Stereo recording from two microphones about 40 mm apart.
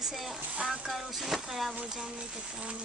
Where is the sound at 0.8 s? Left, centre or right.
Centre.